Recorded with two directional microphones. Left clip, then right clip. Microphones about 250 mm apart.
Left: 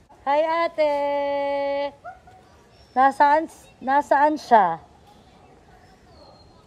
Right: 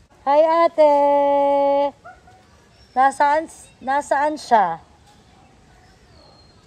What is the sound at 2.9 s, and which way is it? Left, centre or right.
A man's voice, centre.